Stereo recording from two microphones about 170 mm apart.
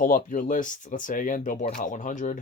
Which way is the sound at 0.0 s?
50° left (ahead or behind).